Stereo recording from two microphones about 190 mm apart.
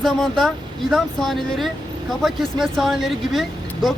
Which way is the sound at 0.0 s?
Centre (ahead or behind).